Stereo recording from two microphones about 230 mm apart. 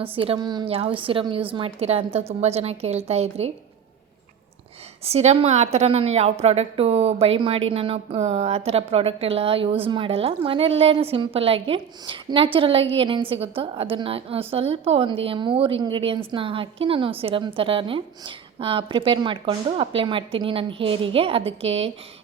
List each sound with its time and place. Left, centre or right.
0.1 s a woman's voice: right
5.0 s a woman's voice: right